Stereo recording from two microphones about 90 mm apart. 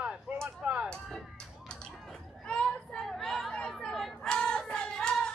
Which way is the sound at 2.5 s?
10° left (ahead or behind).